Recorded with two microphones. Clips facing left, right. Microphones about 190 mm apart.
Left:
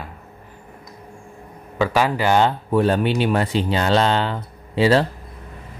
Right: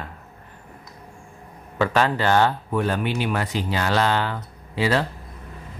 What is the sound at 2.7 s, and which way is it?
Speech, 30° left (ahead or behind).